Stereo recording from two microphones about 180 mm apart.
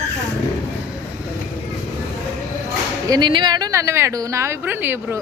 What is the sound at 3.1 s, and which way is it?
Speech, 25° right (ahead or behind).